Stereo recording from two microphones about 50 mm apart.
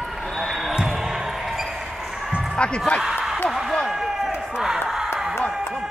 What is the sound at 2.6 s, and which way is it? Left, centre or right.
Music, left.